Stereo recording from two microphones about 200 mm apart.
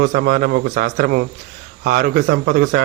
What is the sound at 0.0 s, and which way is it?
A man's voice, 50° right (ahead or behind).